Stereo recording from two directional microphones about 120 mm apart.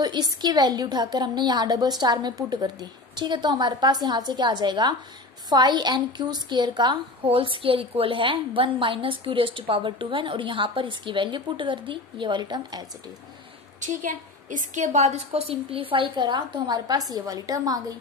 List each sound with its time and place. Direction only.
0.0 s a woman's voice: 35° right (ahead or behind)
13.7 s a woman's voice: 90° right; by 17.9 s 30° right (ahead or behind)